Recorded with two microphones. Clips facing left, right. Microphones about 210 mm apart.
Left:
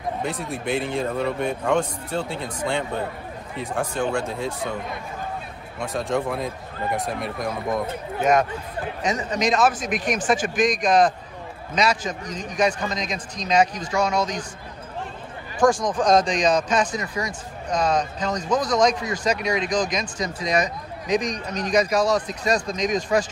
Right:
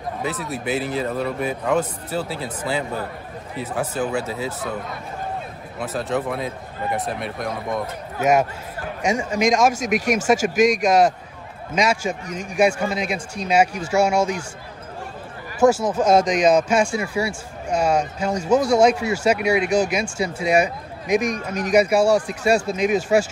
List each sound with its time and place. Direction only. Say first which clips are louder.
0.2 s speech: right 1 dB; 5° right (ahead or behind)
5.8 s speech: even; centre (ahead or behind)
15.6 s speech: right 3 dB; 10° right (ahead or behind)